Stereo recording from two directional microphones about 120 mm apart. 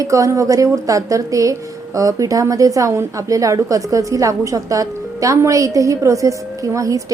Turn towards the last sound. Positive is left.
turn(degrees=-30)  # may be behind; listen again after turning